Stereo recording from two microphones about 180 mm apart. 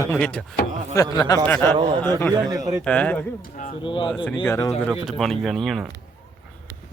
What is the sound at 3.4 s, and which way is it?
Speech, 50° left (ahead or behind).